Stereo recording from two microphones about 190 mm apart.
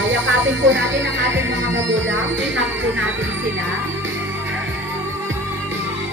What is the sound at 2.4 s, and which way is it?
Speech, 75° right (ahead or behind).